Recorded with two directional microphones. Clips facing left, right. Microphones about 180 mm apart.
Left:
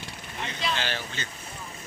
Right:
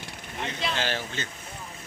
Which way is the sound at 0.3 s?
50° right (ahead or behind).